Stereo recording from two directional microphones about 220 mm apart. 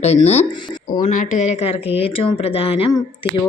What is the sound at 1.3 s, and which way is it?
A woman's voice, 30° left (ahead or behind).